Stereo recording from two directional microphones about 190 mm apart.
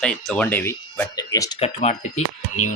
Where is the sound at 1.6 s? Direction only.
35° left (ahead or behind).